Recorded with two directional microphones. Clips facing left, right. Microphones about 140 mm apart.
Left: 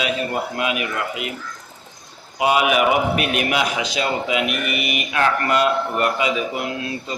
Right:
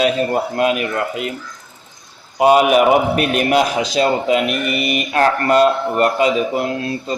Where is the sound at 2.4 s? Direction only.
40° right (ahead or behind).